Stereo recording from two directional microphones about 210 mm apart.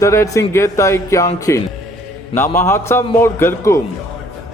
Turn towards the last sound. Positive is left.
turn(degrees=10)  # may be behind; listen again after turning